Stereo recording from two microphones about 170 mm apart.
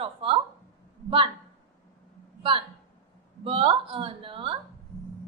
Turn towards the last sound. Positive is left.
turn(degrees=-30)  # may be behind; listen again after turning